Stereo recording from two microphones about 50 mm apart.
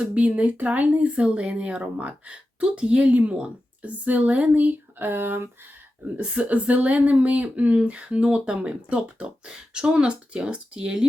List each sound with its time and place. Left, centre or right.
0.0 s speech: right
6.1 s speech: right